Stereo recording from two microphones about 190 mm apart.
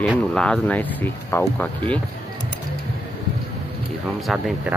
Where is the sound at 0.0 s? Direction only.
Centre (ahead or behind).